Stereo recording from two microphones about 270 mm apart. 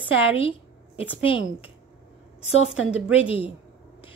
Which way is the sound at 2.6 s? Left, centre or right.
Centre.